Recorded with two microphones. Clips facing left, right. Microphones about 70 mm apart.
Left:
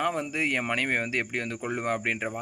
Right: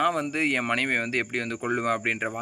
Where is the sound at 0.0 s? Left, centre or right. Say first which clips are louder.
Right 3 dB; right.